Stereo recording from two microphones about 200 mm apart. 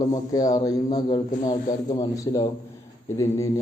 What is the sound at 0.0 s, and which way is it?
A man's voice, 15° left (ahead or behind).